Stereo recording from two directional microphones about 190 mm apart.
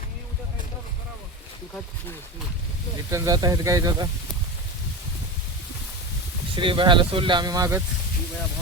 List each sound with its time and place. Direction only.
3.1 s speech: 15° right (ahead or behind)
6.6 s speech: 25° right (ahead or behind)